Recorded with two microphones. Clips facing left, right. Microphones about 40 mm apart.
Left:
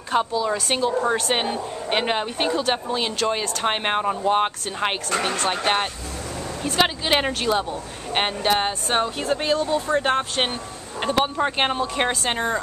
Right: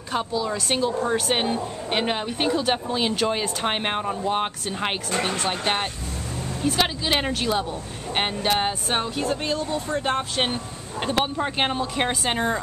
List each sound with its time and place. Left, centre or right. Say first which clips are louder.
0.1 s speech: left 4 dB; centre
6.8 s speech: left 5 dB; centre
9.0 s speech: left 1 dB; centre
9.3 s speech: left 4 dB; left
9.8 s speech: left 3 dB; left
10.1 s speech: left 1 dB; centre